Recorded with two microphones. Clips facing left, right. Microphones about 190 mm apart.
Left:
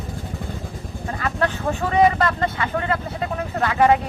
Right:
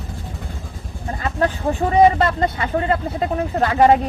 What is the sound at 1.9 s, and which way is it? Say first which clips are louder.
Speech: right 3 dB; 30° right (ahead or behind).